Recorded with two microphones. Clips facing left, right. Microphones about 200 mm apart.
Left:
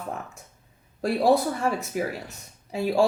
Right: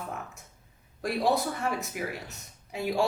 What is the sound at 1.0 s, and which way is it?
Speech, 30° left (ahead or behind).